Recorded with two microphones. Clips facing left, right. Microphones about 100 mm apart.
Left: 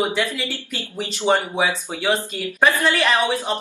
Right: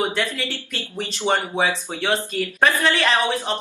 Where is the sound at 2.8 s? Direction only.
5° left (ahead or behind).